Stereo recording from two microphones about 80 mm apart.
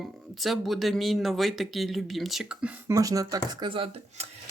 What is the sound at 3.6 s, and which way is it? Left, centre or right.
Speech, right.